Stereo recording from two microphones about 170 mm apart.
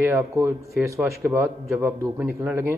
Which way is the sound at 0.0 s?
15° right (ahead or behind).